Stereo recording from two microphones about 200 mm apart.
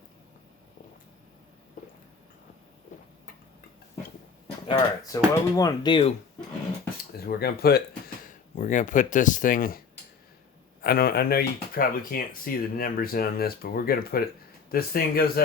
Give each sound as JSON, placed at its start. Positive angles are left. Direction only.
{"t": 1.8, "sound": "a sound", "side_deg": 40}
{"t": 4.7, "sound": "speech", "side_deg": 15}
{"t": 7.3, "sound": "speech", "side_deg": 50}
{"t": 8.3, "sound": "speech", "side_deg": 40}